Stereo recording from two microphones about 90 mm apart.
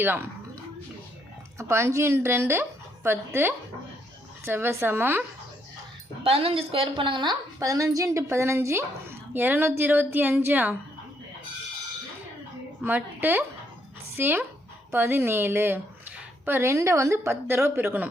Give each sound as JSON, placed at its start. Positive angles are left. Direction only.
{"t": 0.0, "sound": "a woman's voice", "side_deg": -25}
{"t": 1.5, "sound": "a woman's voice", "side_deg": -30}
{"t": 6.2, "sound": "a woman's voice", "side_deg": -90}
{"t": 7.6, "sound": "a woman's voice", "side_deg": -40}
{"t": 12.8, "sound": "a woman's voice", "side_deg": -20}